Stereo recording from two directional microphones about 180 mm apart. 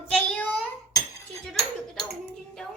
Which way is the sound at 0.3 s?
10° left (ahead or behind).